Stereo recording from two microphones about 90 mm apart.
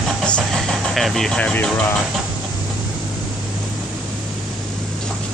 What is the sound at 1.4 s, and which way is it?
Speech, 15° left (ahead or behind).